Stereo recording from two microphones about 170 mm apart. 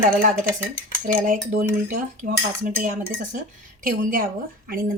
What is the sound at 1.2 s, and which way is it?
Speech, 50° right (ahead or behind).